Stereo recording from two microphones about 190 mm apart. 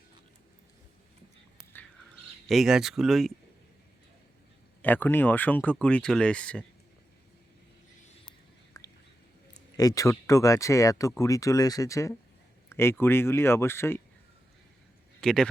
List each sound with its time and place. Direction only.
2.5 s speech: centre (ahead or behind)
4.8 s speech: 10° left (ahead or behind)
8.7 s whispering: 15° left (ahead or behind)
9.7 s speech: 20° left (ahead or behind)
15.2 s speech: 5° left (ahead or behind)